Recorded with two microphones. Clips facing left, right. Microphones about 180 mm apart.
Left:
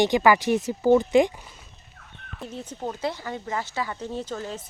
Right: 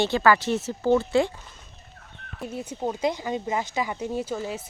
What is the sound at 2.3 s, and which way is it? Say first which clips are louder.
A woman's voice: right 3 dB; 10° right (ahead or behind).